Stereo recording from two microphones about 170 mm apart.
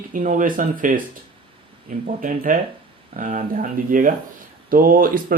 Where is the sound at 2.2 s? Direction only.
50° right (ahead or behind).